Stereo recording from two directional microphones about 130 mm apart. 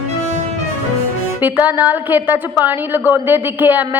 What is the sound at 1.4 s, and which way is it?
A woman's voice, 10° right (ahead or behind).